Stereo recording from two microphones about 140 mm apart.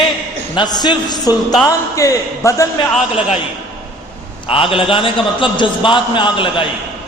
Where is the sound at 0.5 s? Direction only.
30° left (ahead or behind).